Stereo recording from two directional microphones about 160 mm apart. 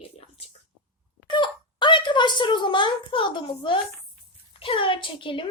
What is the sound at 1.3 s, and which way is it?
A woman's voice, 30° left (ahead or behind).